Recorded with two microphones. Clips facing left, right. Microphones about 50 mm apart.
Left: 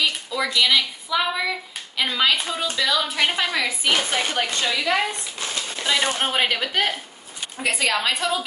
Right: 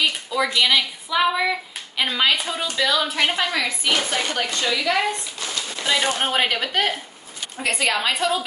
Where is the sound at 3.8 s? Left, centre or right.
Left.